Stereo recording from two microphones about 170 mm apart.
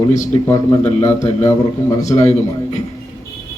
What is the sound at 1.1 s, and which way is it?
A man's voice, 40° left (ahead or behind).